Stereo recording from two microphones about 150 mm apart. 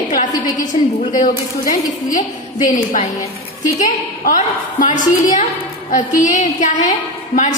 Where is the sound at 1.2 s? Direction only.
60° left (ahead or behind).